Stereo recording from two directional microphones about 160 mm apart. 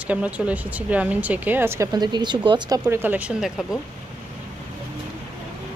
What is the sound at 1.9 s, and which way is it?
Speech, 25° right (ahead or behind).